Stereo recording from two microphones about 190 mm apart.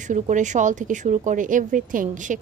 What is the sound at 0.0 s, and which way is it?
A woman's voice, 40° right (ahead or behind).